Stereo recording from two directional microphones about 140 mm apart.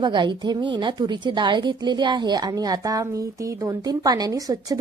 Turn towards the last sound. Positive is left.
turn(degrees=-25)  # may be behind; listen again after turning